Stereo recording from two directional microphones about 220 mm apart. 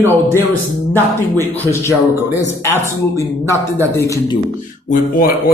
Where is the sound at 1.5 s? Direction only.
10° left (ahead or behind).